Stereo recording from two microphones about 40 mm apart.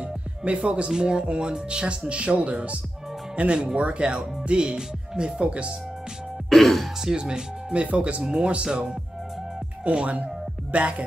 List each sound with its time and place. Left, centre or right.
0.0 s music: right
0.9 s speech: right
6.5 s music: centre
7.0 s speech: centre
9.8 s speech: right